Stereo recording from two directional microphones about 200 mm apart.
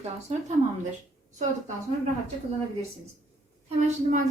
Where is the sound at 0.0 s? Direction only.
35° right (ahead or behind).